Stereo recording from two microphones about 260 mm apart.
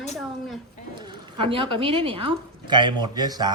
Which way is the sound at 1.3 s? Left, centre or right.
Centre.